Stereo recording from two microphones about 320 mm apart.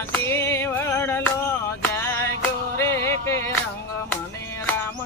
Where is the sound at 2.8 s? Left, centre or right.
Centre.